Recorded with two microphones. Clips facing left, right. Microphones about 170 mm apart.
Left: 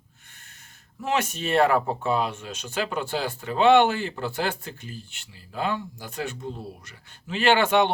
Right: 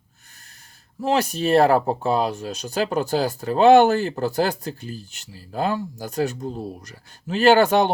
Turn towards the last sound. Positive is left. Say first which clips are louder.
# right 5 dB
turn(degrees=-40)  # may be behind; listen again after turning